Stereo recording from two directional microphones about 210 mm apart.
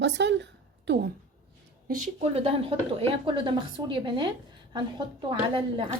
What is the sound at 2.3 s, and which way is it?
A woman's voice, 30° right (ahead or behind).